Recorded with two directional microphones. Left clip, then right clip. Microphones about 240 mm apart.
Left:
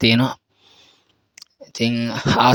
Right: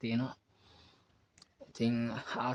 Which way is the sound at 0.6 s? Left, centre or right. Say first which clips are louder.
Left 11 dB; left.